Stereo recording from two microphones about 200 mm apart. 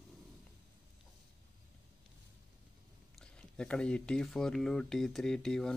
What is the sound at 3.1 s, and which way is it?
Speech, 5° left (ahead or behind).